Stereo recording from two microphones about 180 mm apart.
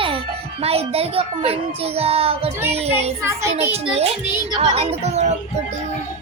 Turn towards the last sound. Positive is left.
turn(degrees=-35)  # may be behind; listen again after turning